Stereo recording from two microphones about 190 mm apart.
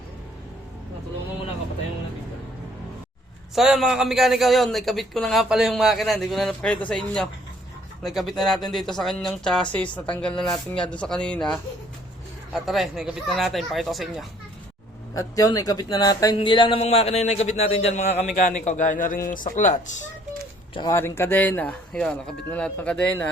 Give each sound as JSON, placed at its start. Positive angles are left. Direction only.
{"t": 3.5, "sound": "a man's voice", "side_deg": 0}
{"t": 15.1, "sound": "speech", "side_deg": 20}
{"t": 20.7, "sound": "a man's voice", "side_deg": 20}